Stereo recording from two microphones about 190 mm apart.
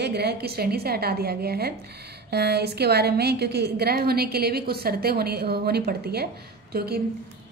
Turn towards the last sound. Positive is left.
turn(degrees=-55)  # may be behind; listen again after turning